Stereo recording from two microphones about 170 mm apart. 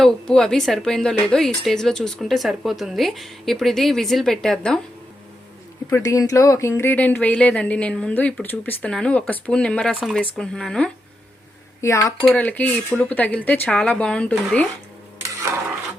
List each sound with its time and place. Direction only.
0.0 s speech: 5° left (ahead or behind)
5.9 s speech: 20° left (ahead or behind); by 10.9 s 5° left (ahead or behind)
11.8 s speech: 15° left (ahead or behind)